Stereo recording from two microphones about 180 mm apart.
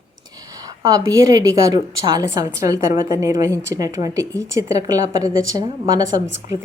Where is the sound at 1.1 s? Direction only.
20° right (ahead or behind).